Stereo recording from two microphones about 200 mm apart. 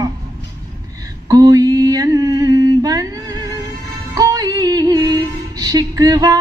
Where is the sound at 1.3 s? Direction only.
20° right (ahead or behind).